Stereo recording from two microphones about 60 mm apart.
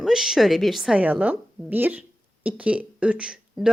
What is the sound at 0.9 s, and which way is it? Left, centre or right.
A woman's voice, right.